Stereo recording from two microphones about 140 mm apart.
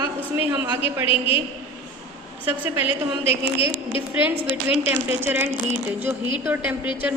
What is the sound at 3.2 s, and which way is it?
Speech, 40° left (ahead or behind).